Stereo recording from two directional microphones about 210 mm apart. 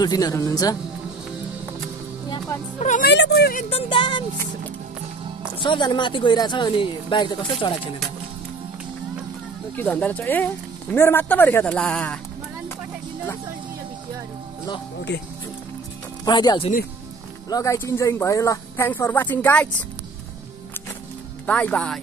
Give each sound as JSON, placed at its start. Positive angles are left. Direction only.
{"t": 0.0, "sound": "speech", "side_deg": 15}
{"t": 2.2, "sound": "music", "side_deg": 20}
{"t": 2.8, "sound": "speech", "side_deg": 35}
{"t": 3.1, "sound": "a woman's voice", "side_deg": 55}
{"t": 3.7, "sound": "speech", "side_deg": 25}
{"t": 5.6, "sound": "speech", "side_deg": 20}
{"t": 9.8, "sound": "speech", "side_deg": 5}
{"t": 15.1, "sound": "speech", "side_deg": 55}
{"t": 16.3, "sound": "speech", "side_deg": 20}
{"t": 21.5, "sound": "speech", "side_deg": 5}